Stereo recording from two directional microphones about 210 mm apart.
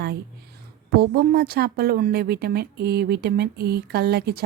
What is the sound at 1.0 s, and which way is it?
A woman's voice, 45° right (ahead or behind).